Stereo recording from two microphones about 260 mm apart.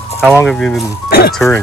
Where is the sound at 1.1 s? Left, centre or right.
Left.